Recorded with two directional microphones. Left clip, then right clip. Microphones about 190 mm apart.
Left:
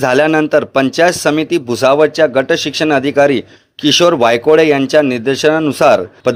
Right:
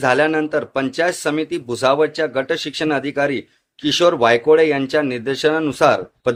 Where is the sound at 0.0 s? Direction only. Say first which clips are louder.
Left 5 dB; 40° left (ahead or behind).